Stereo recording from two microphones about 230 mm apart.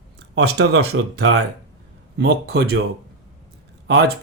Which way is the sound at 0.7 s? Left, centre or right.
Right.